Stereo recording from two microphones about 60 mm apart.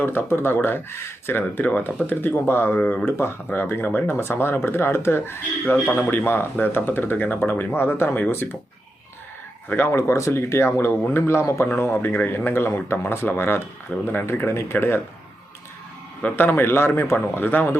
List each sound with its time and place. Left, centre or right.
0.0 s speech: left
3.1 s speech: left
9.6 s speech: left
9.9 s speech: left
11.7 s speech: left
16.3 s speech: left